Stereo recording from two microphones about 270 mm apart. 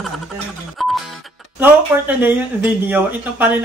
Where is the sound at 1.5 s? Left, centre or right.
Centre.